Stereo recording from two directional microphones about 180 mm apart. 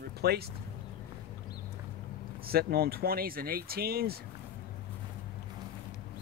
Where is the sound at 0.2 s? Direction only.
60° right (ahead or behind).